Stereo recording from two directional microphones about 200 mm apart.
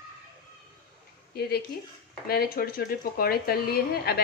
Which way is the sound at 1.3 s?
50° left (ahead or behind).